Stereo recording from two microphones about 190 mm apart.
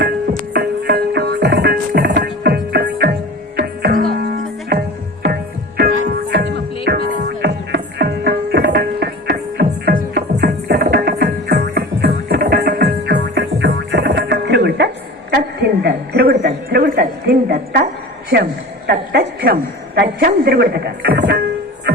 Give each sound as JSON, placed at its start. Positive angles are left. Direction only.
{"t": 0.5, "sound": "music", "side_deg": -55}
{"t": 15.3, "sound": "a sound", "side_deg": -55}
{"t": 20.0, "sound": "a man's voice", "side_deg": -55}